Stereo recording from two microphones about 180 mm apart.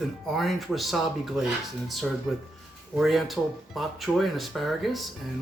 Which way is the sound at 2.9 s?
Centre (ahead or behind).